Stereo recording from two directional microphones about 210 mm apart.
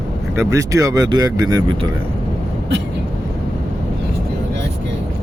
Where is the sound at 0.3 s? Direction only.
15° right (ahead or behind).